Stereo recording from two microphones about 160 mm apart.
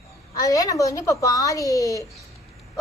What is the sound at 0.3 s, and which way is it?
A woman's voice, 20° left (ahead or behind).